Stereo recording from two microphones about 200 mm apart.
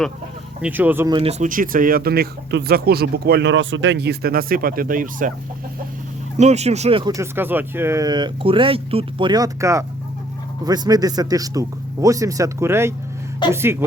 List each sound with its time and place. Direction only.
0.6 s a man's voice: 10° right (ahead or behind)
1.3 s speech: 40° right (ahead or behind)
6.3 s a man's voice: 35° right (ahead or behind); by 13.8 s 10° right (ahead or behind)